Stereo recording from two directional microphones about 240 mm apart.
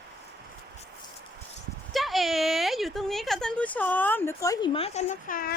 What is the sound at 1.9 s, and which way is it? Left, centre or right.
Speech, centre.